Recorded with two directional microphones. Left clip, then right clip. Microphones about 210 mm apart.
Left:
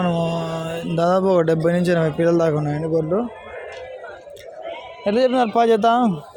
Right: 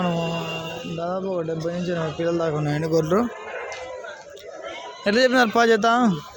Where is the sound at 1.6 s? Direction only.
30° left (ahead or behind); by 3.3 s centre (ahead or behind).